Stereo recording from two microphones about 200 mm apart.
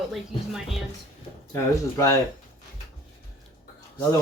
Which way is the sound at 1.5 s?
15° left (ahead or behind).